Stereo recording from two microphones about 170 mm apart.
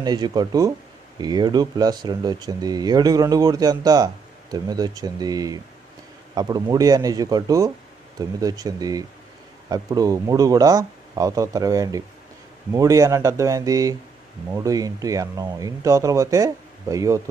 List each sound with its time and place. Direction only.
0.0 s speech: 25° right (ahead or behind)